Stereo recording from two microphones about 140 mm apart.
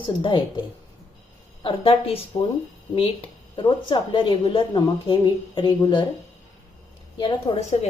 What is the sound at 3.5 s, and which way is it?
A woman's voice, 35° left (ahead or behind).